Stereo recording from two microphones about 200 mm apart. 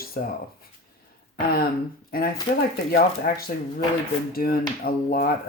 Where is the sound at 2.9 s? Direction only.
45° left (ahead or behind).